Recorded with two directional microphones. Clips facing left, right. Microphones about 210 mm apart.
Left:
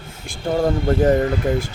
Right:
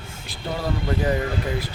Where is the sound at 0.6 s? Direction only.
45° left (ahead or behind).